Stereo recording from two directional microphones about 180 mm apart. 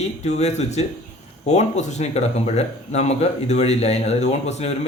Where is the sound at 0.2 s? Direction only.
40° left (ahead or behind).